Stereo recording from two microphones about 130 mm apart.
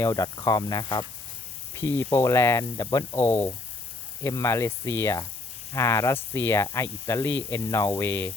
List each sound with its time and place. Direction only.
0.0 s speech: 25° left (ahead or behind)
1.7 s speech: 20° left (ahead or behind)
3.2 s speech: 15° left (ahead or behind)